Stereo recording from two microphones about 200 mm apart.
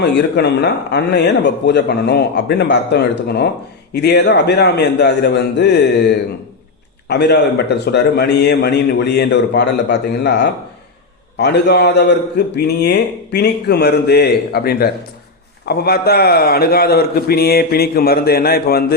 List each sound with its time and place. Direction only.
0.0 s a man's voice: 55° left (ahead or behind)
7.1 s a man's voice: 55° left (ahead or behind)